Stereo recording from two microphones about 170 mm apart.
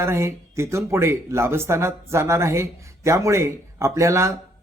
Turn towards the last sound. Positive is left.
turn(degrees=-15)  # may be behind; listen again after turning